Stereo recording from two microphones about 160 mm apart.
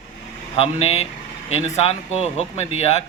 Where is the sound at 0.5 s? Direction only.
40° left (ahead or behind).